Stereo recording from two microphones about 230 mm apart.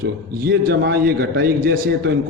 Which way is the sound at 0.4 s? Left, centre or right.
Right.